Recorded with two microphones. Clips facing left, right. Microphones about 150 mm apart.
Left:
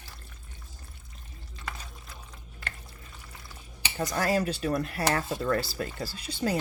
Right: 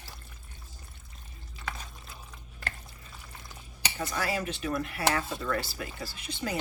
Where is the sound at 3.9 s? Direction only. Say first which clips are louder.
Left 5 dB; 45° left (ahead or behind).